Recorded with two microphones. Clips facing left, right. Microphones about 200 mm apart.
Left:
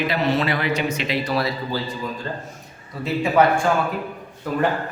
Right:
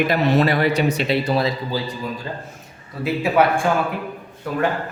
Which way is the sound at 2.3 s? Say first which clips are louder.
Even; 10° right (ahead or behind).